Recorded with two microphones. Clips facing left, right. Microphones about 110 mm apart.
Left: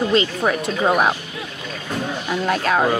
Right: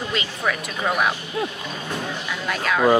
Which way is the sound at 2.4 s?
40° left (ahead or behind).